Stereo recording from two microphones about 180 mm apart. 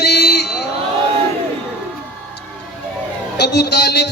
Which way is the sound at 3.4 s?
65° left (ahead or behind).